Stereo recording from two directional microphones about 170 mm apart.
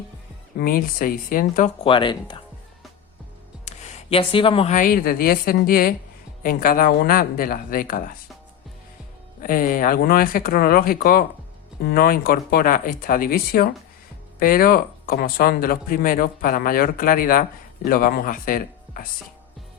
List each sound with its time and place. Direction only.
0.5 s speech: 55° left (ahead or behind)
1.8 s speech: 30° left (ahead or behind)
3.7 s a sound: 40° left (ahead or behind)
4.7 s speech: 55° left (ahead or behind)
9.4 s speech: 55° left (ahead or behind)